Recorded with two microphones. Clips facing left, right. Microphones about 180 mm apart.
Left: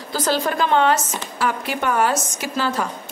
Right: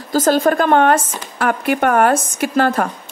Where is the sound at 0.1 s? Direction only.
45° right (ahead or behind).